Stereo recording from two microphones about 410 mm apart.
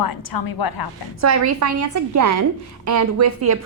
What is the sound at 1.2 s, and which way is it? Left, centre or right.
A woman's voice, right.